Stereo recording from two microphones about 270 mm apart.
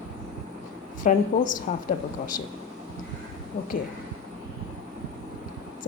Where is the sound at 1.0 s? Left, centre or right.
Left.